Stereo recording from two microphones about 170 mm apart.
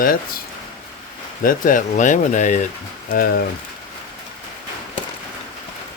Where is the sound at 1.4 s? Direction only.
50° left (ahead or behind).